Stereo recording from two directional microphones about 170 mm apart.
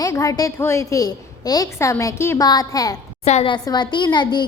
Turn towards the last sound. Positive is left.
turn(degrees=25)  # may be behind; listen again after turning